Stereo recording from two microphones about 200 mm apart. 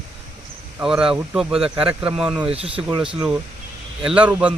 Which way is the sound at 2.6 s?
25° right (ahead or behind).